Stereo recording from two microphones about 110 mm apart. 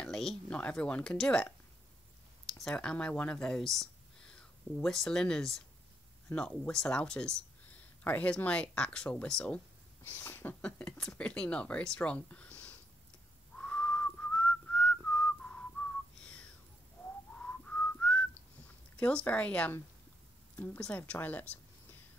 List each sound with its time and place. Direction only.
0.0 s speech: 5° left (ahead or behind)
2.6 s speech: 5° left (ahead or behind)
13.6 s whistling: 10° left (ahead or behind)
18.9 s a woman's voice: 10° left (ahead or behind)